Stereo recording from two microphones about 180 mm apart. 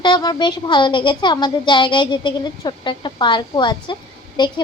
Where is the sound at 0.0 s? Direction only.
20° left (ahead or behind).